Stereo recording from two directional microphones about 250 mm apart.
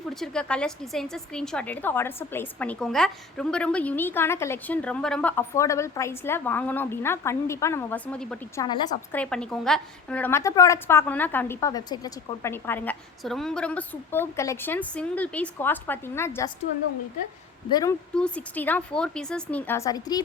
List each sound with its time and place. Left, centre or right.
0.1 s a woman's voice: centre
8.6 s a woman's voice: centre
9.2 s a woman's voice: centre
17.7 s a woman's voice: centre
18.1 s a woman's voice: centre